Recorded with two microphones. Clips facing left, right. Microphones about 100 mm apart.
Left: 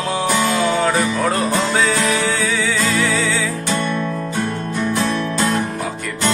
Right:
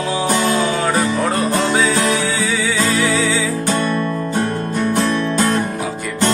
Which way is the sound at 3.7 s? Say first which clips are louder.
Right 2 dB; 45° right (ahead or behind).